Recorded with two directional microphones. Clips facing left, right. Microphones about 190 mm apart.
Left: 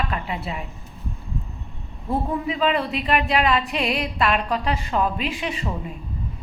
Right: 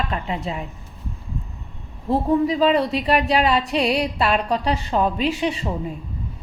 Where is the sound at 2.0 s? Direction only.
35° right (ahead or behind).